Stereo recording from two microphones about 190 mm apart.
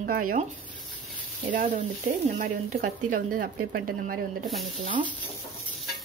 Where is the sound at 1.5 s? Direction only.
40° right (ahead or behind).